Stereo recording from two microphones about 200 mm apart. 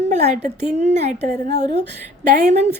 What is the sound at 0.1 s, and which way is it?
Speech, 35° right (ahead or behind).